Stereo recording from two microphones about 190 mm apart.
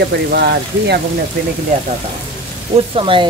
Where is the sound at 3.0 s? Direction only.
25° right (ahead or behind).